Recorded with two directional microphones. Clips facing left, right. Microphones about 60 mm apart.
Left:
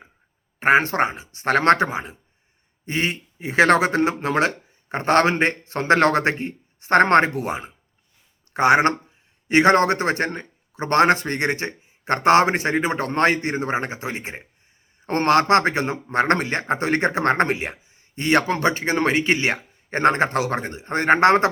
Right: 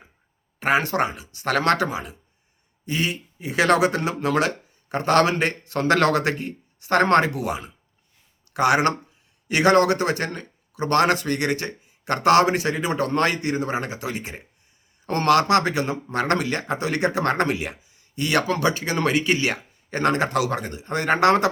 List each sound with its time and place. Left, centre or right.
0.6 s speech: left